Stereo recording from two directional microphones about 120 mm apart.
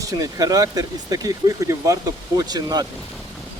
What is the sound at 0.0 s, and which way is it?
Speech, 30° right (ahead or behind).